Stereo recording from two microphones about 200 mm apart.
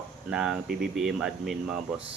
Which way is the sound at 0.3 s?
5° right (ahead or behind).